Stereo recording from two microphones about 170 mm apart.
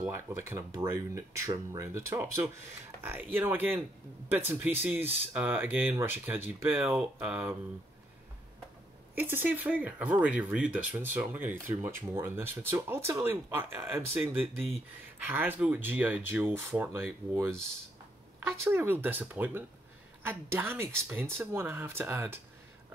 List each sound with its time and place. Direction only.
0.0 s speech: 15° right (ahead or behind)
9.1 s speech: 10° right (ahead or behind)
18.6 s speech: 15° right (ahead or behind)